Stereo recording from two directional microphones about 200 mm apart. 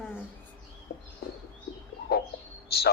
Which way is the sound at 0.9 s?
50° left (ahead or behind).